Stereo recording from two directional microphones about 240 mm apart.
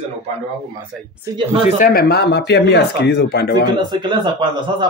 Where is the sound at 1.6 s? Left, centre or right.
Left.